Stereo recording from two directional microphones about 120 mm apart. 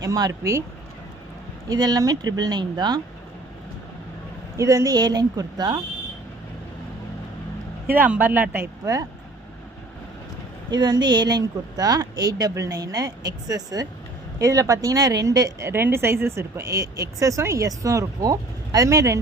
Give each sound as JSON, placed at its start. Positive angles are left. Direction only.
{"t": 0.0, "sound": "a woman's voice", "side_deg": -30}
{"t": 1.7, "sound": "a woman's voice", "side_deg": -30}
{"t": 4.5, "sound": "a woman's voice", "side_deg": -25}
{"t": 7.9, "sound": "speech", "side_deg": -15}
{"t": 10.7, "sound": "a woman's voice", "side_deg": -35}